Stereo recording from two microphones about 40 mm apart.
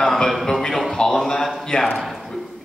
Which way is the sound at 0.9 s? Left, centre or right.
Centre.